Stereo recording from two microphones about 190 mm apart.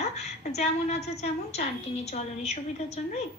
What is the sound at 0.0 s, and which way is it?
A woman's voice, 35° left (ahead or behind).